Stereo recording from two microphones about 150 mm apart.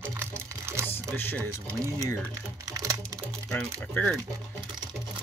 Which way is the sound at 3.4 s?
10° left (ahead or behind).